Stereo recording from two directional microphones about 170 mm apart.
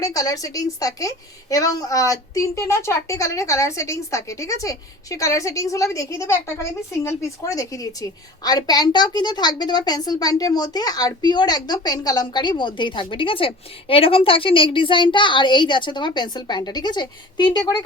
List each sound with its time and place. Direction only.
0.0 s a woman's voice: 20° left (ahead or behind)